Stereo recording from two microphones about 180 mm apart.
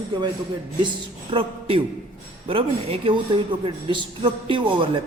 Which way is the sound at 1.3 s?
30° right (ahead or behind).